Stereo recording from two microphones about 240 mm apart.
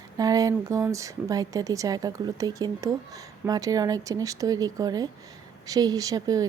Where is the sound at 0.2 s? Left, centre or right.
Centre.